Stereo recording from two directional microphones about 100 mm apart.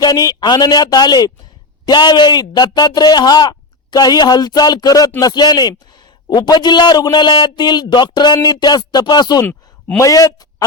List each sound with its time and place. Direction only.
0.0 s speech: 40° left (ahead or behind)
9.5 s a sound: 15° left (ahead or behind)
10.0 s a man's voice: 35° left (ahead or behind)